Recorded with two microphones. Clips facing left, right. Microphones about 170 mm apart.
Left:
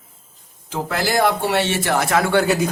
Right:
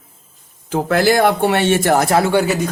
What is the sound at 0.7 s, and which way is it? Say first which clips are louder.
Speech: right 7 dB; 55° right (ahead or behind).